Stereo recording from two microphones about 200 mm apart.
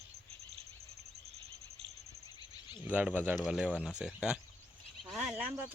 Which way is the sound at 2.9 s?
5° right (ahead or behind).